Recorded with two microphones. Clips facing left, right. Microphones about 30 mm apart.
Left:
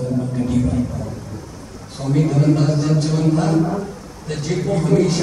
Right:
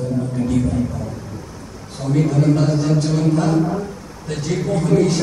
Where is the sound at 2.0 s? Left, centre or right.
Centre.